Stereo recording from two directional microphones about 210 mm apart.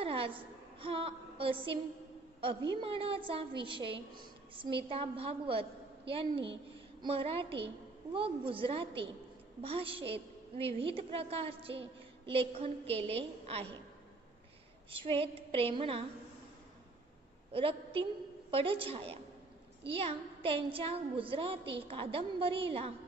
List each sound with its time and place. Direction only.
0.0 s a sound: 25° right (ahead or behind)
0.7 s a woman's voice: 25° right (ahead or behind)
2.8 s a woman's voice: 25° right (ahead or behind)
14.9 s a woman's voice: 25° right (ahead or behind)
17.5 s a woman's voice: 25° right (ahead or behind)